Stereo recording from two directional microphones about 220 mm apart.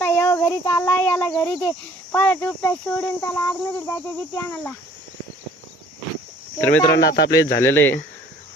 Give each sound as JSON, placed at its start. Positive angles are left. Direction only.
{"t": 0.0, "sound": "speech", "side_deg": 10}
{"t": 6.6, "sound": "speech", "side_deg": 10}
{"t": 6.9, "sound": "speech", "side_deg": 50}
{"t": 7.6, "sound": "speech", "side_deg": 10}